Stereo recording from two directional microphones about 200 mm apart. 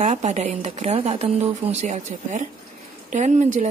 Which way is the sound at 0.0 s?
35° right (ahead or behind).